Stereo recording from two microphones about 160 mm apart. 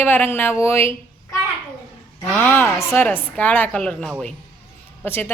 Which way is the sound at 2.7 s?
15° left (ahead or behind).